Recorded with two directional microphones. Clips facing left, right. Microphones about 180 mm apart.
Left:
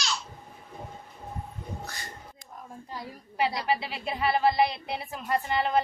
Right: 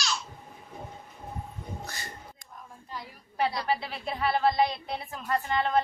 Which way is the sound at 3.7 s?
5° left (ahead or behind).